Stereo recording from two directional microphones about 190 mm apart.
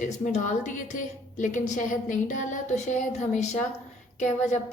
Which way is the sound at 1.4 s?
40° left (ahead or behind).